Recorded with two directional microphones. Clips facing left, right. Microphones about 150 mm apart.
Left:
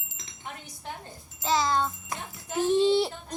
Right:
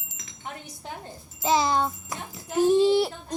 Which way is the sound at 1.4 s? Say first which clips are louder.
Right 3 dB; 20° right (ahead or behind).